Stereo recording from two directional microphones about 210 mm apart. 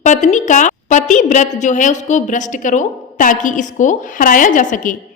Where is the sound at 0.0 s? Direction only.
35° left (ahead or behind).